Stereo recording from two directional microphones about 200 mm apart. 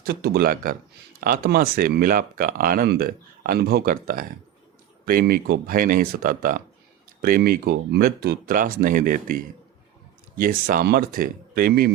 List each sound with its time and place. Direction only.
0.0 s speech: 50° right (ahead or behind)